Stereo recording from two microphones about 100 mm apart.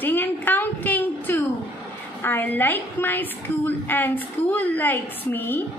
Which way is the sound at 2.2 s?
20° left (ahead or behind).